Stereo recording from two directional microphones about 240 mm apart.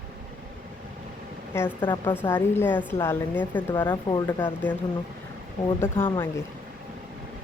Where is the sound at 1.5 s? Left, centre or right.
Centre.